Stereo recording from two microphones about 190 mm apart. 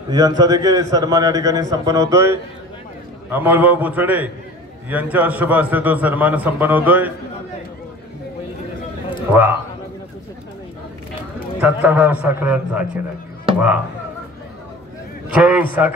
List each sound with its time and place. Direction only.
0.1 s a man's voice: 20° right (ahead or behind)
9.3 s a man's voice: 10° right (ahead or behind)
11.6 s a man's voice: 10° right (ahead or behind)
15.2 s a man's voice: 5° right (ahead or behind)